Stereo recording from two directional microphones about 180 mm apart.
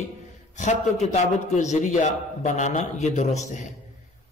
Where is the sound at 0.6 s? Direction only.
40° left (ahead or behind).